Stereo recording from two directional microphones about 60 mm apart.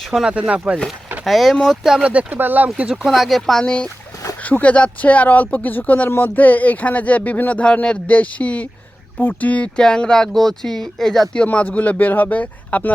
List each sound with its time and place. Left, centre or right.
0.1 s speech: centre
0.3 s speech: right
1.2 s speech: centre
1.8 s speech: centre
2.0 s speech: right
2.4 s speech: right
3.1 s speech: centre; by 9.6 s left
9.7 s speech: centre
11.4 s speech: left